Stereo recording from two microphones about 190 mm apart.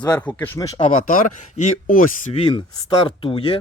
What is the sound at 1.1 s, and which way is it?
Speech, 45° left (ahead or behind).